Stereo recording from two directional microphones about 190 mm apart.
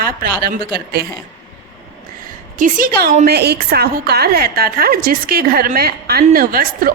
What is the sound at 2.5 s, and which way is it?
Speech, 45° right (ahead or behind).